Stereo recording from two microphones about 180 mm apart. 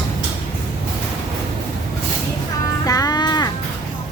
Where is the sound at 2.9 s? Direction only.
20° left (ahead or behind).